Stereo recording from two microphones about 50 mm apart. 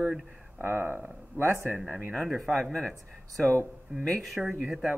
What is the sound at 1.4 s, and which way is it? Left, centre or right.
Speech, right.